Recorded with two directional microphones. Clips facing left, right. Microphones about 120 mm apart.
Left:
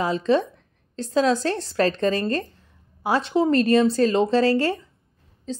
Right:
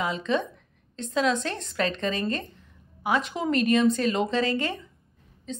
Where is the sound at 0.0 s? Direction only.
35° left (ahead or behind).